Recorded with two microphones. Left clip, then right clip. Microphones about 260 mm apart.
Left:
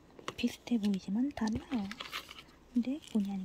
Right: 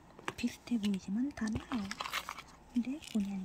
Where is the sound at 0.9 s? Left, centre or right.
Centre.